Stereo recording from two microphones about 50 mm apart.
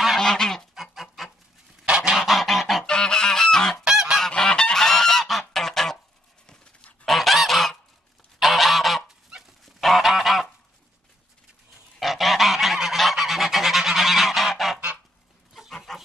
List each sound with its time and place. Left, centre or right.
0.2 s goose: centre
0.7 s goose: centre
1.9 s goose: centre
2.1 s goose: centre
2.8 s goose: centre
3.8 s goose: centre
4.4 s goose: centre
6.4 s a sound: centre
7.1 s goose: centre
12.0 s goose: centre
15.7 s chicken: centre